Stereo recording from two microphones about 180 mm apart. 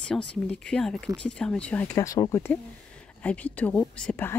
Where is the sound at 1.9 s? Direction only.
20° left (ahead or behind).